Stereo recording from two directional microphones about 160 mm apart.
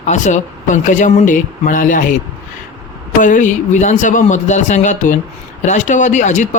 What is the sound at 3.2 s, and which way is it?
Speech, 50° left (ahead or behind).